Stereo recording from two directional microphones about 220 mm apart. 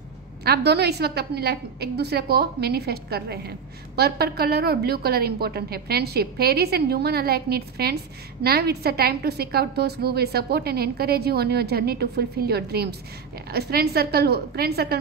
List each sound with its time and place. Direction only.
0.5 s a woman's voice: 45° right (ahead or behind)